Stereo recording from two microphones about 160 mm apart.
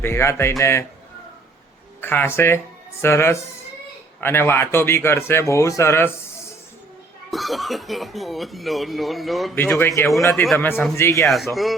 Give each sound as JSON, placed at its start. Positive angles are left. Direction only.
{"t": 0.0, "sound": "a man's voice", "side_deg": 15}
{"t": 2.0, "sound": "a man's voice", "side_deg": 15}
{"t": 7.3, "sound": "speech", "side_deg": 0}
{"t": 9.6, "sound": "a man's voice", "side_deg": 15}
{"t": 11.3, "sound": "speech", "side_deg": 0}